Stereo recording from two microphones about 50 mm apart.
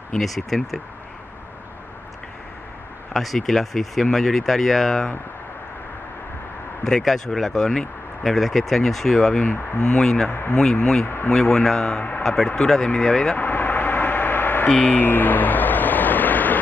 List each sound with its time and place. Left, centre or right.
0.2 s speech: centre
3.1 s speech: centre
6.8 s speech: centre
9.4 s speech: left
9.8 s speech: centre
10.3 s speech: left
11.3 s speech: centre
13.4 s vehicle: left
14.7 s a sound: left
15.0 s vehicle: left